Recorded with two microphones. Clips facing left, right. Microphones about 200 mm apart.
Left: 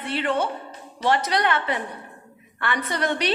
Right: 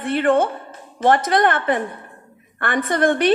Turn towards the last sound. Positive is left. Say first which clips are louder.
# right 7 dB
turn(degrees=-50)  # may be behind; listen again after turning